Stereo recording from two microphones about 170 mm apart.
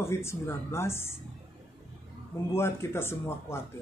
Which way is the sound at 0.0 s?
15° left (ahead or behind).